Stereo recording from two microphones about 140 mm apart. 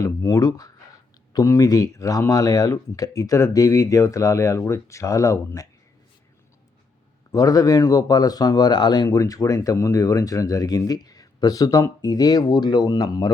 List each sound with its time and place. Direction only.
0.0 s speech: 25° left (ahead or behind)
7.3 s speech: 25° left (ahead or behind)